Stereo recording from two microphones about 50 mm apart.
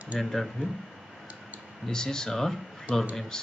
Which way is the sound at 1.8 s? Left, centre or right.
Centre.